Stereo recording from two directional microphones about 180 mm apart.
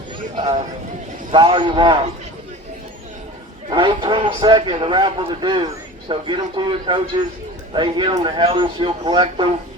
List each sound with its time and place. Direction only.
0.3 s a man's voice: 25° right (ahead or behind)
3.7 s a man's voice: 25° right (ahead or behind)